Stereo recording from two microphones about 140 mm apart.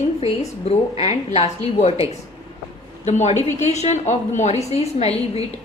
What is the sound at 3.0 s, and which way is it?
A woman's voice, 55° left (ahead or behind).